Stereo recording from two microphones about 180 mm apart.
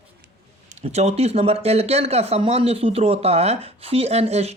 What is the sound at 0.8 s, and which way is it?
Speech, 35° right (ahead or behind).